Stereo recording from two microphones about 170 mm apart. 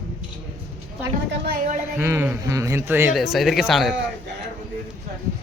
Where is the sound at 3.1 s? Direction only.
Centre (ahead or behind).